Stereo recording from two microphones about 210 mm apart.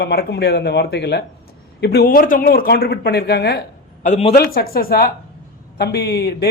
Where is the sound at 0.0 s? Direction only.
50° left (ahead or behind).